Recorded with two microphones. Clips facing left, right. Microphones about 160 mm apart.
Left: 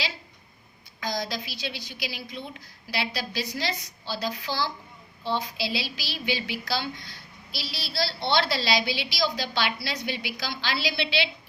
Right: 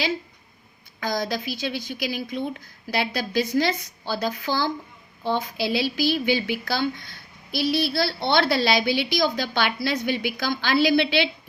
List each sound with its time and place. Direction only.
0.9 s a woman's voice: 55° right (ahead or behind)